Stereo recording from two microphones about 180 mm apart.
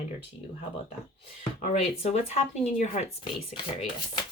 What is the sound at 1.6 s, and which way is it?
Speech, 40° left (ahead or behind).